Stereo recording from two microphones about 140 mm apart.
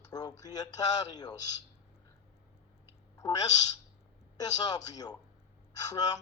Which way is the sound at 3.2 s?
30° left (ahead or behind).